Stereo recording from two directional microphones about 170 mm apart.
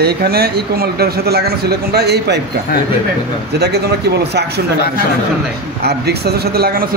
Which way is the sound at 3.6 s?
75° right (ahead or behind).